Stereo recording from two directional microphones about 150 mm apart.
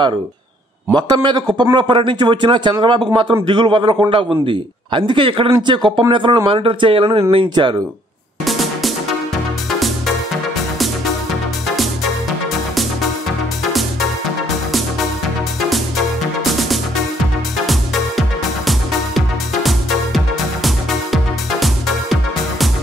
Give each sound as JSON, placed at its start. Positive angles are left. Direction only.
{"t": 0.9, "sound": "a man's voice", "side_deg": -30}
{"t": 8.5, "sound": "music", "side_deg": 0}
{"t": 18.7, "sound": "music", "side_deg": 0}